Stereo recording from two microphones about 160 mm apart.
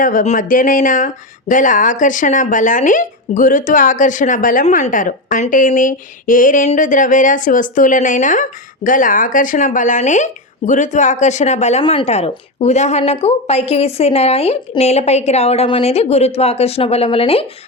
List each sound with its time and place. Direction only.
0.0 s speech: 55° left (ahead or behind); by 17.4 s 35° left (ahead or behind)